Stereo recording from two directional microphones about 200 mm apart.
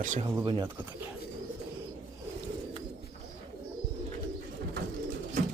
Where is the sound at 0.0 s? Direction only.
40° right (ahead or behind).